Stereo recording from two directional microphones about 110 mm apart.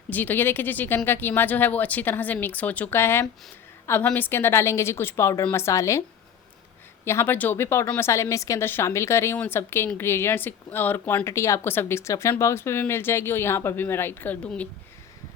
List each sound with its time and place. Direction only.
0.1 s speech: 15° left (ahead or behind)
7.0 s speech: 25° left (ahead or behind)